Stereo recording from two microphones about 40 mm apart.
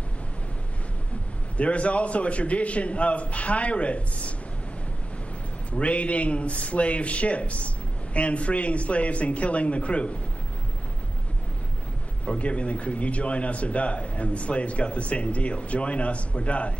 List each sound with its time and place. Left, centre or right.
1.6 s a man's voice: left
5.7 s a man's voice: left
12.3 s a man's voice: left